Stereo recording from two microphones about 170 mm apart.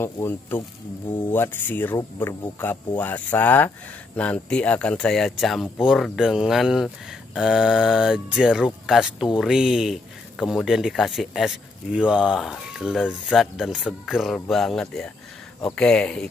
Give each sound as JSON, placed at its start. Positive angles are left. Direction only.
{"t": 0.0, "sound": "speech", "side_deg": 15}
{"t": 0.6, "sound": "speech", "side_deg": 30}
{"t": 1.3, "sound": "speech", "side_deg": 10}